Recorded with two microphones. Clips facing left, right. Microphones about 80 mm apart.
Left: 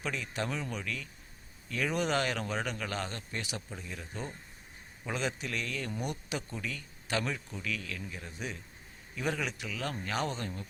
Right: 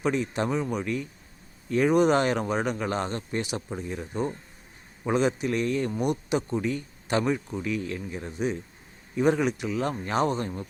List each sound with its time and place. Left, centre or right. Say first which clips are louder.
0.0 s a man's voice: right 9 dB; right